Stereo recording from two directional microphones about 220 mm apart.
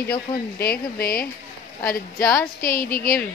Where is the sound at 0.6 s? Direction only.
45° left (ahead or behind).